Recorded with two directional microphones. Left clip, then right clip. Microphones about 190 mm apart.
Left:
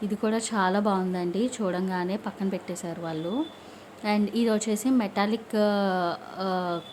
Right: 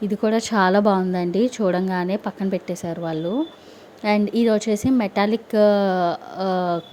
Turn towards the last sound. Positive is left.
turn(degrees=-30)  # may be behind; listen again after turning